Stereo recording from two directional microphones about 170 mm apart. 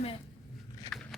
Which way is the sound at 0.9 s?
5° left (ahead or behind).